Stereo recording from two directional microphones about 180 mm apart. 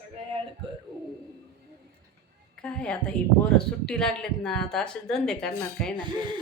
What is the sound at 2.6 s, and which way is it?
Speech, 5° left (ahead or behind).